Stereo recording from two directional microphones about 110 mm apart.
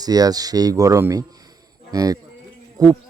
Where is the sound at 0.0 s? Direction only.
35° right (ahead or behind).